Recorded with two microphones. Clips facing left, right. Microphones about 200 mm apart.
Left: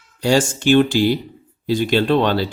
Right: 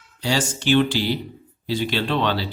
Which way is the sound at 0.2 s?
45° left (ahead or behind).